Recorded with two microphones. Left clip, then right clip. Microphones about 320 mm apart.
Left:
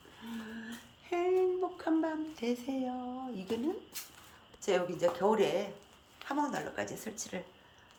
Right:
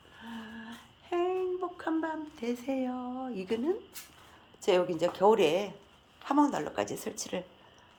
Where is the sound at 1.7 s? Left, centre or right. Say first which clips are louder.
Even; centre.